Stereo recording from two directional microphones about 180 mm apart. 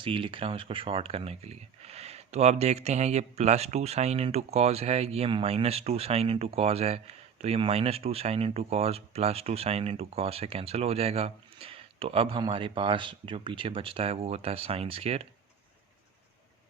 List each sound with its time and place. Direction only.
0.0 s speech: 30° right (ahead or behind)